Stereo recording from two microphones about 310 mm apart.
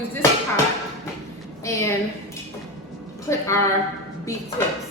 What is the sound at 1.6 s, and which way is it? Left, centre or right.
Speech, centre.